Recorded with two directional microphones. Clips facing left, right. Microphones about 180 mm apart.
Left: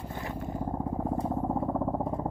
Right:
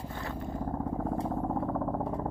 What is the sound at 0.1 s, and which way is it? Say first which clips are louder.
Vehicle: left 2 dB; 20° left (ahead or behind).